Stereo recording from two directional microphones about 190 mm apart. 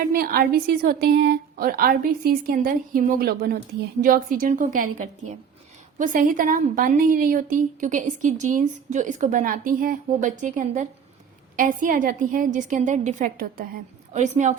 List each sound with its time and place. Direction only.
0.1 s a woman's voice: 50° right (ahead or behind)